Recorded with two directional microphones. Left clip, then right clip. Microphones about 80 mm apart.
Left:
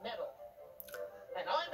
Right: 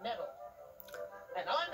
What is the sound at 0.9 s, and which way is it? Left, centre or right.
Music, centre.